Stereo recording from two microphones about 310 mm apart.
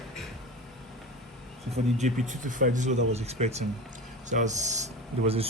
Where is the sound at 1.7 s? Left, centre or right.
Right.